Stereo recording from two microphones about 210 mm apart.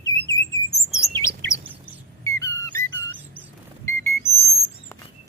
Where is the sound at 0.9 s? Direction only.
Centre (ahead or behind).